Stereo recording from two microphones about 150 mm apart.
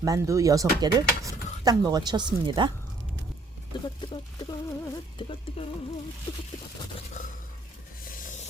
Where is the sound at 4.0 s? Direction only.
25° left (ahead or behind).